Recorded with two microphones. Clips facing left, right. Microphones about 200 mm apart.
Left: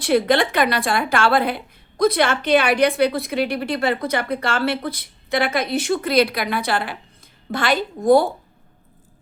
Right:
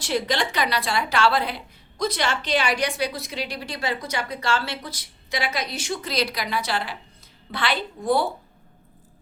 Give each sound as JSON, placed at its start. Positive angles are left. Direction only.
{"t": 0.0, "sound": "a woman's voice", "side_deg": 55}